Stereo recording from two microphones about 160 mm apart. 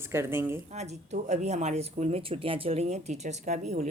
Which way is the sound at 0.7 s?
45° right (ahead or behind).